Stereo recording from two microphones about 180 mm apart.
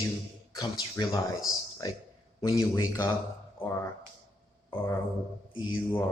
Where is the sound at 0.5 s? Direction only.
20° left (ahead or behind).